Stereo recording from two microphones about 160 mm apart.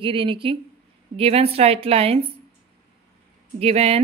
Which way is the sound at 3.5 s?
40° right (ahead or behind).